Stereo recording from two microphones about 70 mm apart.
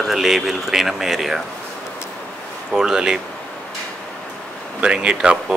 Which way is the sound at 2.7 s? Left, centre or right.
Centre.